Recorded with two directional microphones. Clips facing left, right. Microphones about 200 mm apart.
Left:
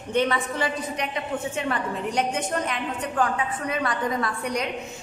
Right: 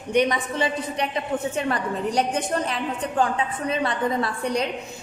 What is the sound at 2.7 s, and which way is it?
A woman's voice, 30° right (ahead or behind).